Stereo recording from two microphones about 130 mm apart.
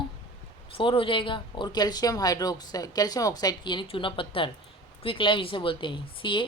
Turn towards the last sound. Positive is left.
turn(degrees=40)  # may be behind; listen again after turning